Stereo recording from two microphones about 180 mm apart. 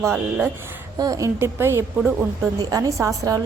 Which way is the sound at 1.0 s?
20° right (ahead or behind).